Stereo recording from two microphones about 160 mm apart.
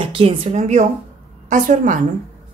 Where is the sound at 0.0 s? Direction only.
35° right (ahead or behind); by 2.0 s 50° right (ahead or behind).